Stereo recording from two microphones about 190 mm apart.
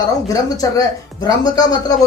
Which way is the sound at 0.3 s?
20° left (ahead or behind).